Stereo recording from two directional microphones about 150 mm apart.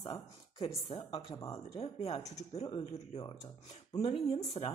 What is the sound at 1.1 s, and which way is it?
Speech, 30° left (ahead or behind).